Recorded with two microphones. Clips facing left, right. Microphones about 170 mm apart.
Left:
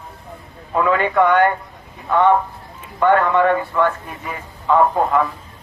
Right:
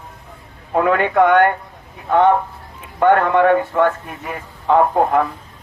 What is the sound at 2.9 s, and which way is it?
A man's voice, 55° right (ahead or behind).